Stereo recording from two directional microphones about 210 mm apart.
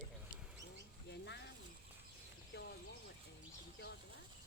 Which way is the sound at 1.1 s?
55° left (ahead or behind).